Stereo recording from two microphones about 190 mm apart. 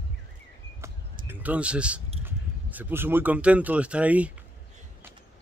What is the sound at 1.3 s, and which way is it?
Speech, 10° right (ahead or behind).